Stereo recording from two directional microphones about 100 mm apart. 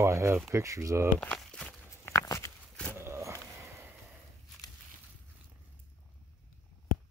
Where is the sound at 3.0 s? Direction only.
25° right (ahead or behind).